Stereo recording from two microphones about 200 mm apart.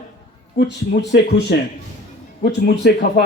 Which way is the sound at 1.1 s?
55° left (ahead or behind).